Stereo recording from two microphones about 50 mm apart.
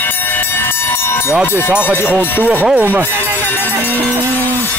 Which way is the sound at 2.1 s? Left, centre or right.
Left.